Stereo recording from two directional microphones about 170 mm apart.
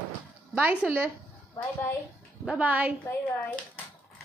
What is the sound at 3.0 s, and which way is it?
Speech, 15° left (ahead or behind).